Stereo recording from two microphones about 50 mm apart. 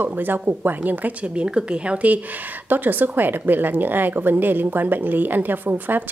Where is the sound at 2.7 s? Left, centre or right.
Right.